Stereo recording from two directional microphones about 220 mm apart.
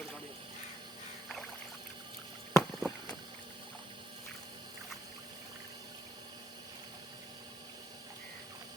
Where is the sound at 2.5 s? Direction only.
5° left (ahead or behind).